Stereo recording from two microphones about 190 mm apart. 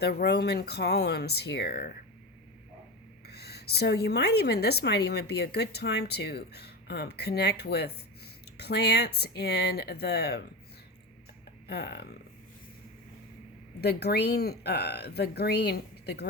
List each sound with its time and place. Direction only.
0.0 s a woman's voice: 55° left (ahead or behind)
3.2 s a woman's voice: 60° left (ahead or behind)
11.7 s a woman's voice: 60° left (ahead or behind)
13.8 s a woman's voice: 60° left (ahead or behind)